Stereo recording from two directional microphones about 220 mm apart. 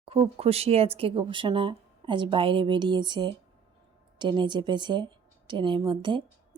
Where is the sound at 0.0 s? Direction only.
25° right (ahead or behind).